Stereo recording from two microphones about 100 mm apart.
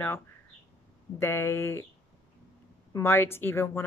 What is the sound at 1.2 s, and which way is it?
Speech, 25° left (ahead or behind).